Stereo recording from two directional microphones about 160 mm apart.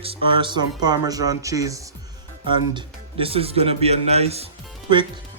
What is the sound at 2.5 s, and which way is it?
Speech, 30° right (ahead or behind).